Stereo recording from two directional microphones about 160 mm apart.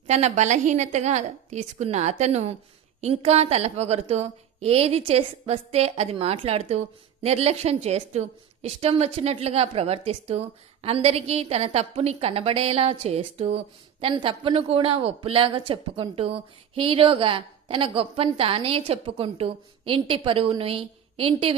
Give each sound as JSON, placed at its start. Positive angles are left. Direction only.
{"t": 0.1, "sound": "a woman's voice", "side_deg": -45}